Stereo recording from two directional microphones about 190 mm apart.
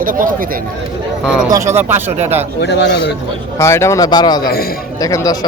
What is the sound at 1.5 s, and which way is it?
Speech, 15° right (ahead or behind).